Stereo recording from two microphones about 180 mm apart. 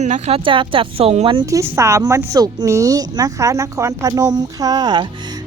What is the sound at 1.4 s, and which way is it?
A woman's voice, 15° right (ahead or behind).